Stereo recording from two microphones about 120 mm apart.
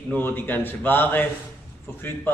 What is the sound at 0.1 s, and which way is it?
Speech, 15° left (ahead or behind).